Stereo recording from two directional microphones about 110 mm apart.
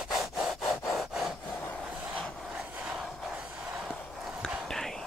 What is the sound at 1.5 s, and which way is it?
Rub, 20° left (ahead or behind).